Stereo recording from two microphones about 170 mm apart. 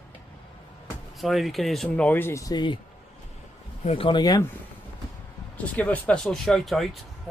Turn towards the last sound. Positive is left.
turn(degrees=0)  # may be behind; listen again after turning